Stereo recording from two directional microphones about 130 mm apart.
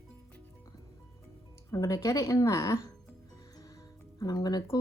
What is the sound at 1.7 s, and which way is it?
Speech, 25° left (ahead or behind).